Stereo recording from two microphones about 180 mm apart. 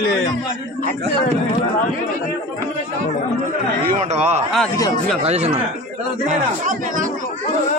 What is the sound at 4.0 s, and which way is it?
Speech, 40° right (ahead or behind).